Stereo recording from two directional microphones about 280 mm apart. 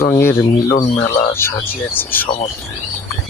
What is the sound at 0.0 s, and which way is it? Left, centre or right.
Speech, centre.